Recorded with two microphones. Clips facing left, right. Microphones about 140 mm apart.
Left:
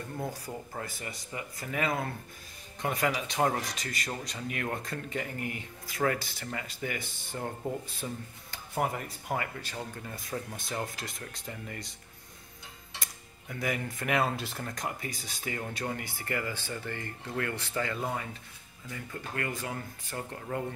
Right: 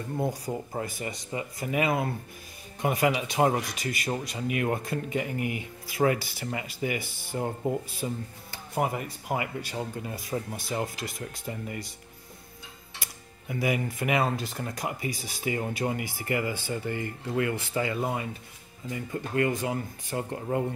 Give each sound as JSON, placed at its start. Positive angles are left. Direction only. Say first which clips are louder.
{"t": 0.2, "sound": "speech", "louder": "right 8 dB", "side_deg": -20}
{"t": 13.0, "sound": "cutlery", "louder": "right 3 dB", "side_deg": -10}
{"t": 14.5, "sound": "speech", "louder": "right 3 dB", "side_deg": -5}